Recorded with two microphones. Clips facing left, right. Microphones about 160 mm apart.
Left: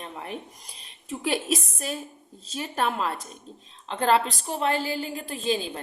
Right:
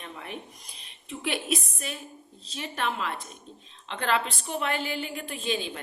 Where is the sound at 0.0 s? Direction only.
35° left (ahead or behind).